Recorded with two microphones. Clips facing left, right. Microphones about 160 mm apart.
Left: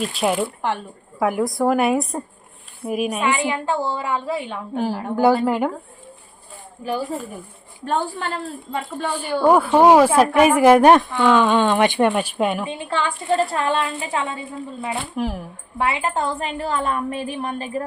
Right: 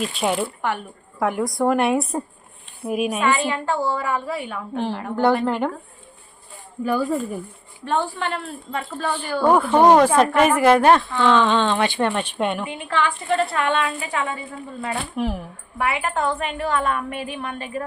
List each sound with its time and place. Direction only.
0.0 s a woman's voice: centre (ahead or behind)
3.2 s a woman's voice: 20° left (ahead or behind)
5.5 s speech: 5° left (ahead or behind)
6.8 s speech: 50° right (ahead or behind)
7.9 s a woman's voice: 35° left (ahead or behind)
8.7 s speech: 15° left (ahead or behind)
12.6 s a woman's voice: 30° left (ahead or behind)
15.1 s a woman's voice: centre (ahead or behind)
15.8 s a woman's voice: 25° left (ahead or behind)